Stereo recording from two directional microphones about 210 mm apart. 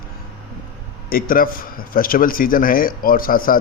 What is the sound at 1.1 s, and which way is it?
A man's voice, 45° left (ahead or behind).